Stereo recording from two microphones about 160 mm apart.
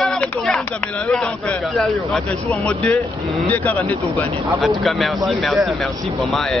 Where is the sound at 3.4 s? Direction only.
10° left (ahead or behind).